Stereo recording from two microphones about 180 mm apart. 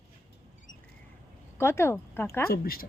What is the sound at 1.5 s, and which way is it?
Speech, 15° left (ahead or behind).